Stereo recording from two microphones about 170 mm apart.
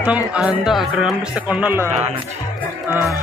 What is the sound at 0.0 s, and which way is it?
Speech, 10° right (ahead or behind).